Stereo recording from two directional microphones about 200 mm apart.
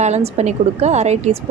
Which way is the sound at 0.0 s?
35° right (ahead or behind).